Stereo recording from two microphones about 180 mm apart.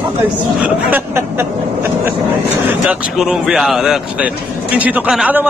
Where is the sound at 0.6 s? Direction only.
10° right (ahead or behind).